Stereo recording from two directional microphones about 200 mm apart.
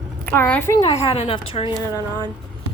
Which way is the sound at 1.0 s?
30° left (ahead or behind).